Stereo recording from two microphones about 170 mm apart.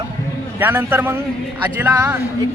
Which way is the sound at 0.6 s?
10° right (ahead or behind).